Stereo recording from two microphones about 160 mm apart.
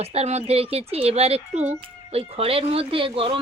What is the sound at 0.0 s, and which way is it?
Speech, 40° right (ahead or behind).